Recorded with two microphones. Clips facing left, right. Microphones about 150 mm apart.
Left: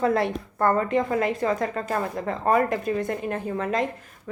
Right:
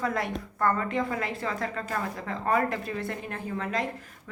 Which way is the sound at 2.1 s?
50° left (ahead or behind).